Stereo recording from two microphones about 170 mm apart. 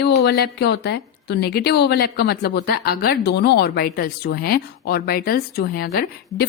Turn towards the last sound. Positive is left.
turn(degrees=60)  # may be behind; listen again after turning